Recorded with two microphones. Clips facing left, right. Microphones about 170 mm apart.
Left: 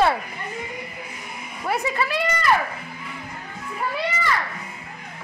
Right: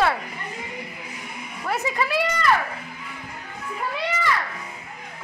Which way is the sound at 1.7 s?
5° right (ahead or behind).